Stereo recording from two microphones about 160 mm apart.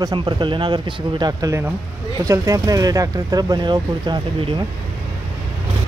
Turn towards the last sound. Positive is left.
turn(degrees=-30)  # may be behind; listen again after turning